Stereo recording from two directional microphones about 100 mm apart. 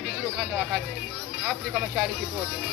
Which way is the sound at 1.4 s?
15° right (ahead or behind).